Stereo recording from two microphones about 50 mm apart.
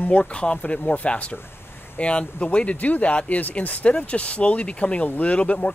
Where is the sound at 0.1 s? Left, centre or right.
Left.